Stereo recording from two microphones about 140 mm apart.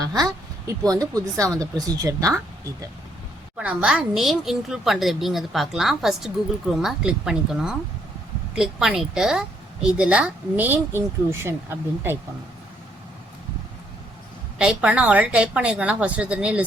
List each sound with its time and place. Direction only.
0.0 s speech: 25° right (ahead or behind)
3.6 s a woman's voice: 10° right (ahead or behind)
14.6 s speech: 5° right (ahead or behind)